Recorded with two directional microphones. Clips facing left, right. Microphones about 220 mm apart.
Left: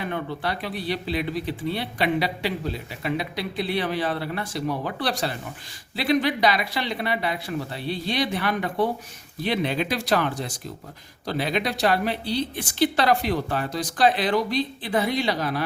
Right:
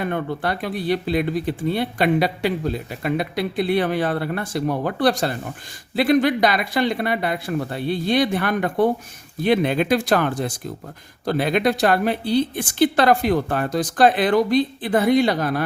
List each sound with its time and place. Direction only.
0.0 s speech: 50° right (ahead or behind)